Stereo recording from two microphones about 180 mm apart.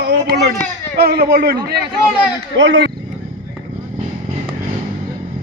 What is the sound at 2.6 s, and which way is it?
Speech, 70° right (ahead or behind).